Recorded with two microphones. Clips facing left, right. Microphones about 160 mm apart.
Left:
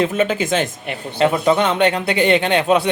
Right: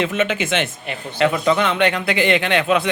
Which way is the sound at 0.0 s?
35° left (ahead or behind).